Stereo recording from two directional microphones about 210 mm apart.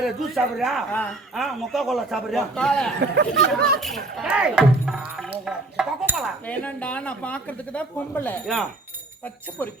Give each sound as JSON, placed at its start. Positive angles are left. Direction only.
{"t": 0.0, "sound": "speech", "side_deg": 0}
{"t": 3.0, "sound": "speech", "side_deg": -55}
{"t": 3.6, "sound": "speech", "side_deg": 0}
{"t": 6.5, "sound": "speech", "side_deg": 5}